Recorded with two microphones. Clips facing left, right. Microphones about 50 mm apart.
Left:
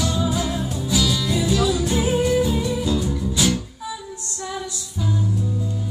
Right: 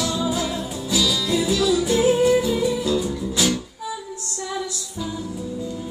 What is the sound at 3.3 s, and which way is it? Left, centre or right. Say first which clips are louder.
Music: even; left.